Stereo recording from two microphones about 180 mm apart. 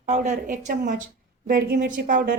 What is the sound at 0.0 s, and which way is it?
A woman's voice, 45° right (ahead or behind).